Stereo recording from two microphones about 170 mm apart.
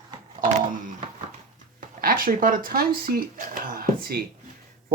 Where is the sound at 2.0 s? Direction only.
55° right (ahead or behind).